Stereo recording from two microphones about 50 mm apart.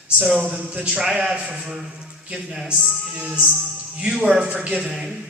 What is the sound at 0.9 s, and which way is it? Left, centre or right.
Speech, centre.